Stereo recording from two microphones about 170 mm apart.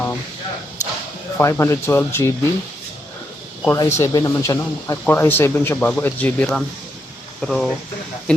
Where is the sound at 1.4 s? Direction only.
15° left (ahead or behind).